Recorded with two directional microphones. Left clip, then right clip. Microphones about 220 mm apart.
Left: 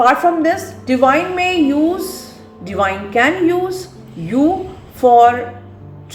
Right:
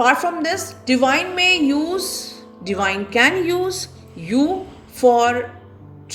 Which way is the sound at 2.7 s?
50° right (ahead or behind).